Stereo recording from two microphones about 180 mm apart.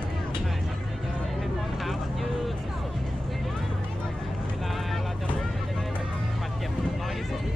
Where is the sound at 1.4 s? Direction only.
Centre (ahead or behind).